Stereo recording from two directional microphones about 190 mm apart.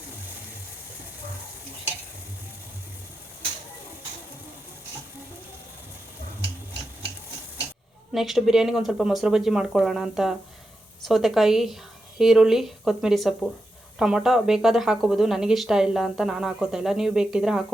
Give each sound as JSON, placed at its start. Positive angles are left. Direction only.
{"t": 8.1, "sound": "a woman's voice", "side_deg": 0}